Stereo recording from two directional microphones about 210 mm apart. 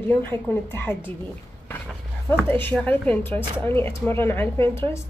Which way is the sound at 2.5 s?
10° left (ahead or behind).